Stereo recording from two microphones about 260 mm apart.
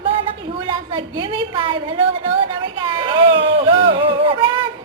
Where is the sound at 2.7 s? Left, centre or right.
Centre.